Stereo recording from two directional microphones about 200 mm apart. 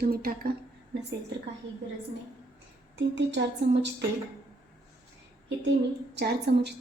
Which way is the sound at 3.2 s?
60° right (ahead or behind).